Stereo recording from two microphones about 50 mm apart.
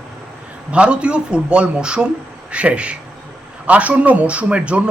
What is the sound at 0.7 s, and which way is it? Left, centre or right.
Speech, right.